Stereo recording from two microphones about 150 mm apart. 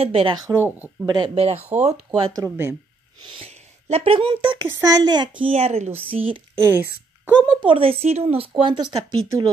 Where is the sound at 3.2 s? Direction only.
40° right (ahead or behind).